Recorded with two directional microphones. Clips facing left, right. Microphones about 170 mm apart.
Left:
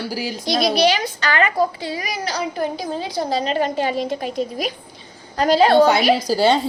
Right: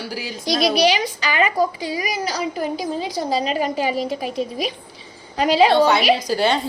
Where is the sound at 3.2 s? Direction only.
10° right (ahead or behind).